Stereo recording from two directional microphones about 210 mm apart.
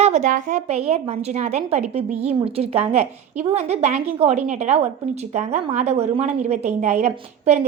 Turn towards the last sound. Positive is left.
turn(degrees=-30)  # may be behind; listen again after turning